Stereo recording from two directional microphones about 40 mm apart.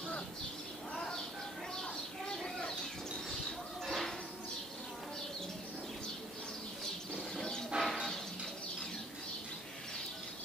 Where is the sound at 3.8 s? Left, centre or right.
Centre.